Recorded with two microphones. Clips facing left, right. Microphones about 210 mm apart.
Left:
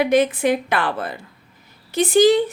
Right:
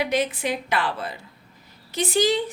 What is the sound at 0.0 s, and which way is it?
A woman's voice, 50° left (ahead or behind).